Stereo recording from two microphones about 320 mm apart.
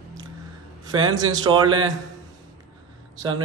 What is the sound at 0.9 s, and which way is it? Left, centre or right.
Speech, centre.